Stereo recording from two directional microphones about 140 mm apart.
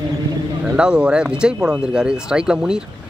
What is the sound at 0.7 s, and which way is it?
Speech, 5° right (ahead or behind).